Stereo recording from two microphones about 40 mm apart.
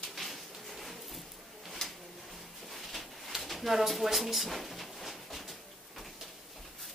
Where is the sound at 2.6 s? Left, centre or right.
Centre.